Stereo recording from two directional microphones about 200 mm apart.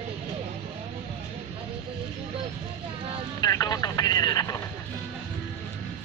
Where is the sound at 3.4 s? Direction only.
15° left (ahead or behind).